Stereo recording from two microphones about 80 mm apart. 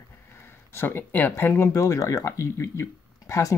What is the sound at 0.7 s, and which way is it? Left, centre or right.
Speech, left.